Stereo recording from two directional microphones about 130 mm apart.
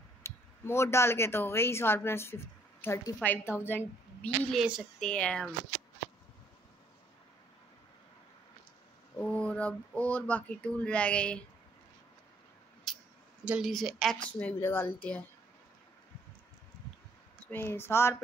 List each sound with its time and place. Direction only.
0.2 s speech: 20° left (ahead or behind)
4.5 s speech: 5° right (ahead or behind)
5.1 s speech: 5° left (ahead or behind)
9.2 s speech: 10° left (ahead or behind)
12.9 s a sound: centre (ahead or behind)
13.5 s speech: centre (ahead or behind)
14.4 s speech: 15° left (ahead or behind)
17.5 s speech: 15° left (ahead or behind)